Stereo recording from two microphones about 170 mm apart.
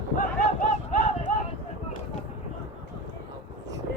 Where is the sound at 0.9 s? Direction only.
50° left (ahead or behind).